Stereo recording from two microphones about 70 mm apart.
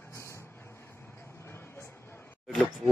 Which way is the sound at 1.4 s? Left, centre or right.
Left.